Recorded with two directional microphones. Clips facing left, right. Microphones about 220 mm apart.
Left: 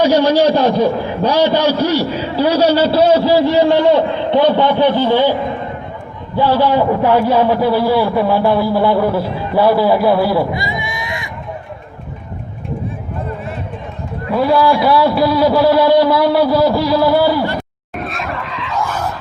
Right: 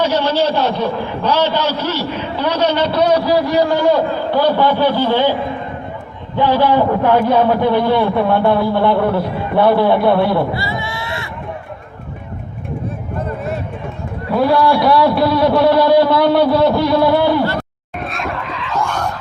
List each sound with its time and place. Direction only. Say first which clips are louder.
0.0 s a man's voice: left 5 dB; 10° left (ahead or behind)
2.0 s a man's voice: left 4 dB; 35° left (ahead or behind)
2.5 s a man's voice: left 4 dB; 10° left (ahead or behind)
2.9 s a man's voice: left 3 dB; 25° left (ahead or behind)
7.0 s a man's voice: even; 10° left (ahead or behind)
10.5 s a man's voice: even; 15° left (ahead or behind)
14.3 s a man's voice: even; centre (ahead or behind)
17.9 s roar: even; centre (ahead or behind)